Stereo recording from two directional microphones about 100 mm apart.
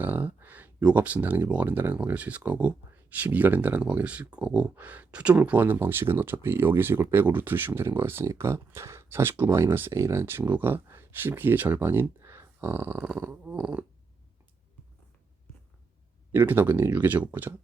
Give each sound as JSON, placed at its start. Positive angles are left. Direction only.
{"t": 0.0, "sound": "speech", "side_deg": -20}
{"t": 16.3, "sound": "speech", "side_deg": -20}